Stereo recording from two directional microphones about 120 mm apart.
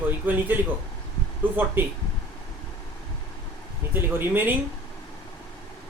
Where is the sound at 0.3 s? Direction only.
15° right (ahead or behind).